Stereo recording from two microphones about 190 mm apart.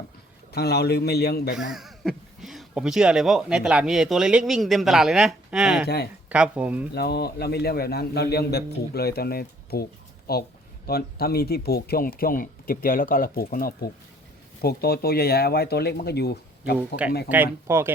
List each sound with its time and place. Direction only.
0.5 s a man's voice: 60° left (ahead or behind)
1.5 s speech: centre (ahead or behind)
6.9 s a man's voice: 55° left (ahead or behind)
17.2 s speech: 10° right (ahead or behind)